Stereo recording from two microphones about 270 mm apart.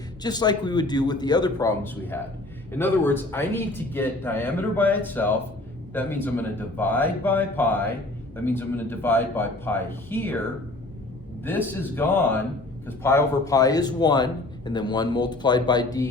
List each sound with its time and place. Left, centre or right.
0.2 s a man's voice: centre
11.4 s a man's voice: centre